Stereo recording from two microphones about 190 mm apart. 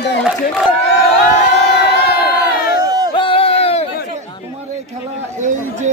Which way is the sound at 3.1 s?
25° left (ahead or behind).